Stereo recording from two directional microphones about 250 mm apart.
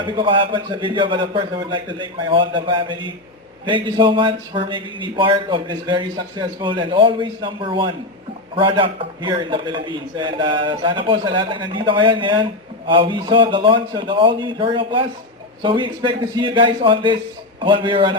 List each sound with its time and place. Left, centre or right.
0.0 s speech: centre